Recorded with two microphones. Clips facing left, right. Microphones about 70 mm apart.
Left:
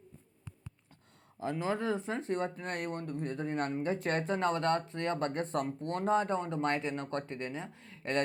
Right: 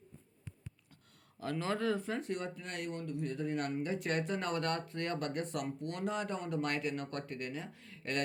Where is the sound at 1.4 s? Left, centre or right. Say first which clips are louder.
Left 2 dB; centre.